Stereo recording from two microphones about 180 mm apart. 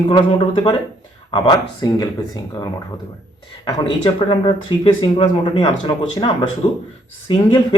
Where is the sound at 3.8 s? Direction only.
30° left (ahead or behind).